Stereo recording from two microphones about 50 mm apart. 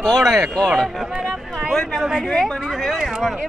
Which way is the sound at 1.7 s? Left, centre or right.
Centre.